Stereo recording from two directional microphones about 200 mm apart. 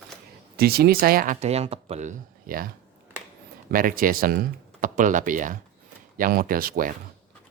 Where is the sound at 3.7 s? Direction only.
45° right (ahead or behind).